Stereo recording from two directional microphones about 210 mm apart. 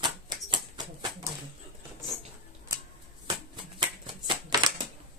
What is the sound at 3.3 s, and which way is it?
Shuffling cards, 20° right (ahead or behind).